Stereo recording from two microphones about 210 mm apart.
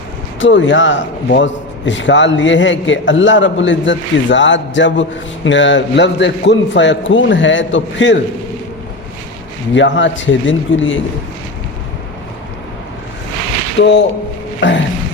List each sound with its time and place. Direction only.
0.3 s a man's voice: 65° left (ahead or behind)
9.7 s a man's voice: 60° left (ahead or behind)
13.7 s a man's voice: 60° left (ahead or behind)